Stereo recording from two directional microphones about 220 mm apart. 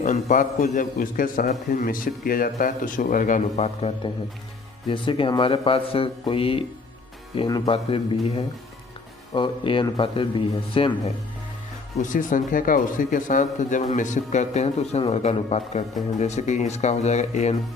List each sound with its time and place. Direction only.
0.0 s a man's voice: 35° left (ahead or behind)
12.0 s a man's voice: 35° left (ahead or behind)